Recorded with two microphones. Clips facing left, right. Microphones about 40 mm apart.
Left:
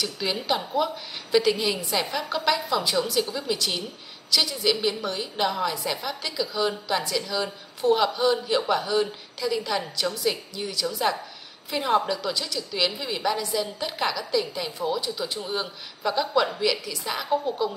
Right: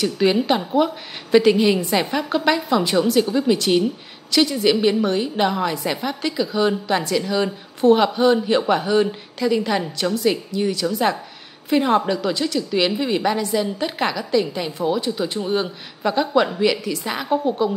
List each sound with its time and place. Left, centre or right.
0.0 s a woman's voice: right
11.9 s a woman's voice: centre